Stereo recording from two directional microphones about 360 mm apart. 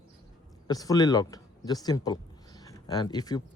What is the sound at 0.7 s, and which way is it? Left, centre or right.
Speech, centre.